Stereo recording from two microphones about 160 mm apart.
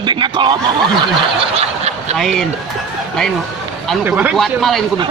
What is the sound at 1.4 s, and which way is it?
Speech, 40° right (ahead or behind).